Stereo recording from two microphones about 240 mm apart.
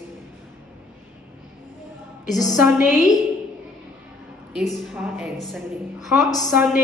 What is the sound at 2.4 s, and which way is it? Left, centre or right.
Speech, centre.